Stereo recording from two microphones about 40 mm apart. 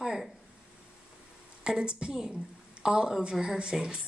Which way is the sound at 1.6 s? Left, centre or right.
Right.